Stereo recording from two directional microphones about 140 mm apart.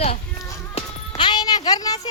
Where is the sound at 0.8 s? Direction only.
45° left (ahead or behind).